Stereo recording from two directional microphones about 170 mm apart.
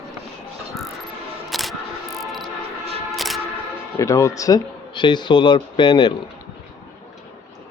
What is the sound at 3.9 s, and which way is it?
Speech, 20° left (ahead or behind).